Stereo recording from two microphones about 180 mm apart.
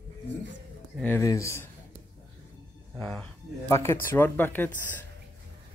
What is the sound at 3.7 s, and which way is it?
Speech, 15° left (ahead or behind).